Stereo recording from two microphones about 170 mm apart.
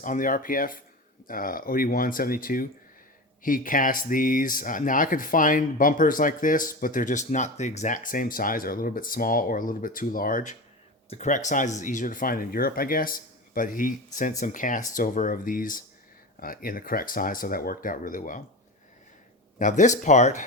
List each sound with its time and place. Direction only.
0.0 s speech: 50° left (ahead or behind)
19.5 s speech: 50° left (ahead or behind)